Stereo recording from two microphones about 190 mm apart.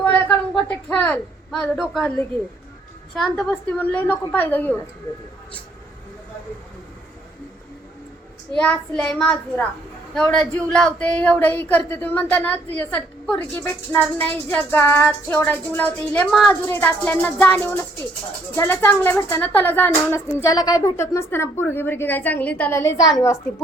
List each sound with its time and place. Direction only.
0.0 s a woman's voice: 10° left (ahead or behind)
3.2 s speech: 5° left (ahead or behind)
8.5 s a child's voice: 5° left (ahead or behind)